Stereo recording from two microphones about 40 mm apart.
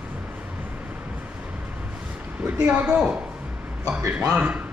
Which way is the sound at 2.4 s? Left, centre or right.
Right.